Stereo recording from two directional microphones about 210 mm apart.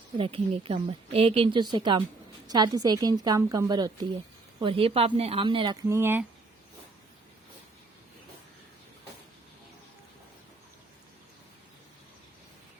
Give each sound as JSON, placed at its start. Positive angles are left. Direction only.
{"t": 0.2, "sound": "a woman's voice", "side_deg": -25}